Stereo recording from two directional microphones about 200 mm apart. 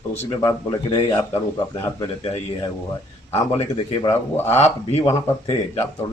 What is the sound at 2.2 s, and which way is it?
Speech, 25° left (ahead or behind).